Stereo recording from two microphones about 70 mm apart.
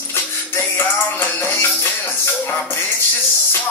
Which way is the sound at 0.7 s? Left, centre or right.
Left.